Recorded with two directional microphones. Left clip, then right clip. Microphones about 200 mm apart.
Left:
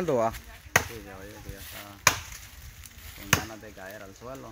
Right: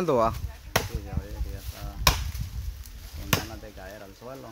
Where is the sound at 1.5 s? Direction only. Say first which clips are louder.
Left 1 dB; 40° left (ahead or behind).